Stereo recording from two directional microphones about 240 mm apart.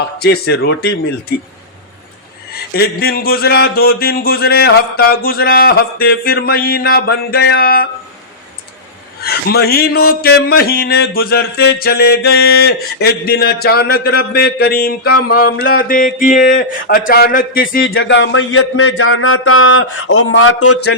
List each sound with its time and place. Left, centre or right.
0.0 s speech: left
2.7 s speech: left
9.2 s speech: left
17.8 s speech: left